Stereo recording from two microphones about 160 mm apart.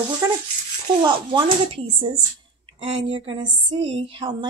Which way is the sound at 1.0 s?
30° right (ahead or behind).